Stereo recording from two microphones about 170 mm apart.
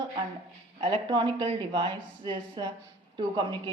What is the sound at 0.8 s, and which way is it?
A woman's voice, 30° right (ahead or behind).